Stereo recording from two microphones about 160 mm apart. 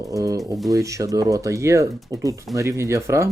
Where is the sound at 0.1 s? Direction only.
20° right (ahead or behind).